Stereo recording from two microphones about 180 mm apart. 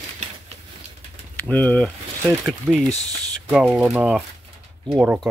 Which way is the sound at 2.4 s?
Centre (ahead or behind).